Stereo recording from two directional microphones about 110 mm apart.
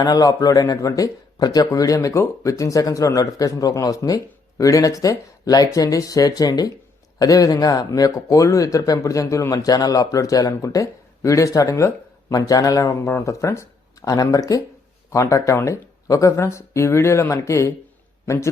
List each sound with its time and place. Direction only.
0.0 s speech: 35° left (ahead or behind)